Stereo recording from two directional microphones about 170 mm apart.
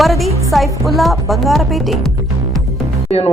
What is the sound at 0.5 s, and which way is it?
Speech, centre (ahead or behind).